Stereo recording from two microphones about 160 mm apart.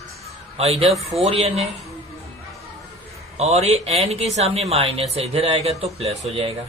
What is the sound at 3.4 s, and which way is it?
Speech, 40° right (ahead or behind).